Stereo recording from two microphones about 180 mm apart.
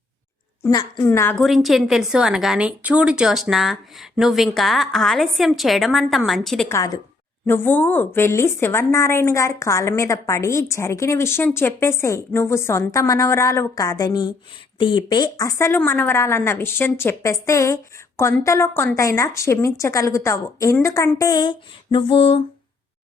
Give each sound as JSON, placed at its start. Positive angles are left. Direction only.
{"t": 0.7, "sound": "a woman's voice", "side_deg": 20}
{"t": 1.4, "sound": "a woman's voice", "side_deg": 0}
{"t": 6.7, "sound": "a woman's voice", "side_deg": 20}
{"t": 21.9, "sound": "a sound", "side_deg": 30}